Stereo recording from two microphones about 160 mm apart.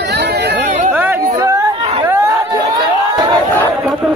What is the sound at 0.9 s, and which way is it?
Chatter, 10° right (ahead or behind).